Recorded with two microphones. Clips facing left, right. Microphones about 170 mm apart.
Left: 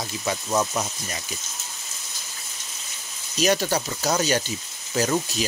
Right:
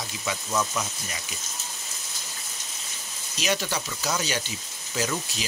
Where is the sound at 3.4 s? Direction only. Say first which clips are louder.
Left 6 dB; 40° left (ahead or behind).